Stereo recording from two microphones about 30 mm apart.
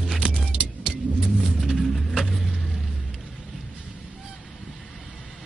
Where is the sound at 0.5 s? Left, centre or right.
Right.